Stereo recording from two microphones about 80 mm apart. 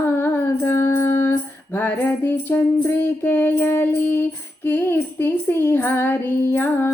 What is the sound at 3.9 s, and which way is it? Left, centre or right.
Child singing, left.